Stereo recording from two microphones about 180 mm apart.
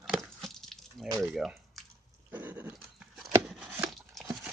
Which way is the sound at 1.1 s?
15° right (ahead or behind).